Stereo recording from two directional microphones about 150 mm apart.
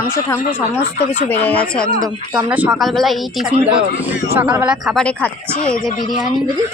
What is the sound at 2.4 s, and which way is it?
Speech, 10° right (ahead or behind).